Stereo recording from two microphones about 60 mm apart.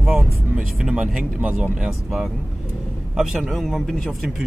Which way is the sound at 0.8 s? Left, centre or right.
Centre.